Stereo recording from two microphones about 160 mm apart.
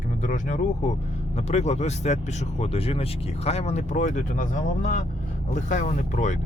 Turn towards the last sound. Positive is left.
turn(degrees=50)  # may be behind; listen again after turning